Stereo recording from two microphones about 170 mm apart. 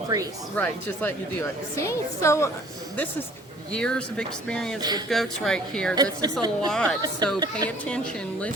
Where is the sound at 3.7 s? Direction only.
5° left (ahead or behind).